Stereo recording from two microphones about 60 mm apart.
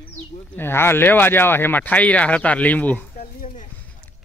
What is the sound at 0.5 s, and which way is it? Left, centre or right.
Speech, left.